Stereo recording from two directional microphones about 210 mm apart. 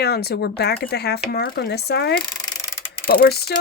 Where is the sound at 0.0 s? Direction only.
50° left (ahead or behind).